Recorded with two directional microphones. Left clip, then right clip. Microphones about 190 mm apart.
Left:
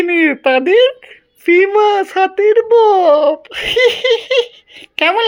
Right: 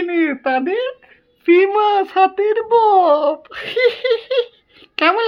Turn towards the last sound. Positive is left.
turn(degrees=10)  # may be behind; listen again after turning